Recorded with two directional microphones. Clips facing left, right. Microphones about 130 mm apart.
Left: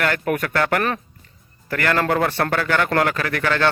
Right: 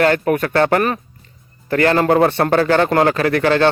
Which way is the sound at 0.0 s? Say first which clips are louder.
Right 6 dB; 30° right (ahead or behind).